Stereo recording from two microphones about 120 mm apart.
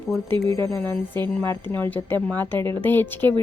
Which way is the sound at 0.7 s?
15° left (ahead or behind).